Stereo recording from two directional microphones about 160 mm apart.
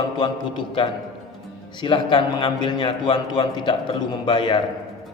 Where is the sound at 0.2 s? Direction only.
30° left (ahead or behind).